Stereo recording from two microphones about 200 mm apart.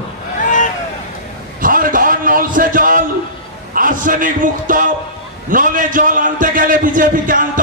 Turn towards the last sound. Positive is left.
turn(degrees=-45)  # may be behind; listen again after turning